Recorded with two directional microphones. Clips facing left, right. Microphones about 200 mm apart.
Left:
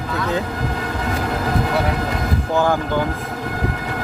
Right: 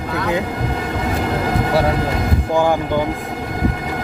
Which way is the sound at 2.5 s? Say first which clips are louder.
Right 2 dB; 15° right (ahead or behind).